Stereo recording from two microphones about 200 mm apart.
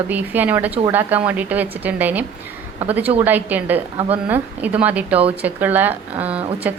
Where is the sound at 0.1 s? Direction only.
10° right (ahead or behind).